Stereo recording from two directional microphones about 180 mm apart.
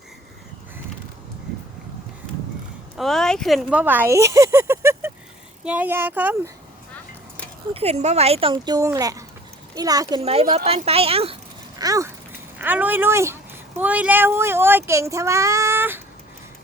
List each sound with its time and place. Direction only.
3.0 s speech: centre (ahead or behind)
7.7 s speech: 35° right (ahead or behind)
10.2 s speech: 35° right (ahead or behind)
11.8 s speech: 20° right (ahead or behind)